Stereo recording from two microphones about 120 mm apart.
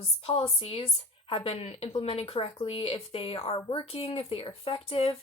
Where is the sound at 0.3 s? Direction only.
55° left (ahead or behind).